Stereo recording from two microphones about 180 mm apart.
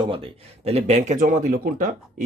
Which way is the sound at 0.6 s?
40° right (ahead or behind).